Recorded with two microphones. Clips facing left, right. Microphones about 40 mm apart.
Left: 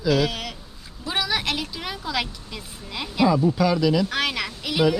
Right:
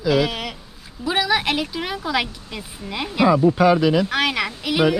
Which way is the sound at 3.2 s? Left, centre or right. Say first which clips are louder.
Right 5 dB; right.